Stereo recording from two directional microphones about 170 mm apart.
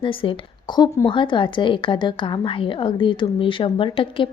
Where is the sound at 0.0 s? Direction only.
30° left (ahead or behind).